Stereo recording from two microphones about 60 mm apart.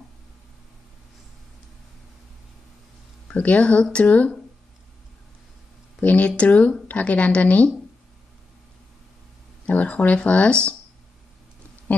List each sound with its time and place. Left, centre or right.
3.3 s speech: left
5.9 s speech: left
9.7 s speech: left